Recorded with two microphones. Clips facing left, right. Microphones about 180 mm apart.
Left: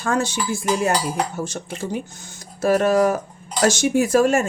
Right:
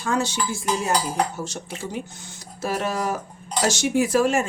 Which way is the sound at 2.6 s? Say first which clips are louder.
Left 9 dB; 50° left (ahead or behind).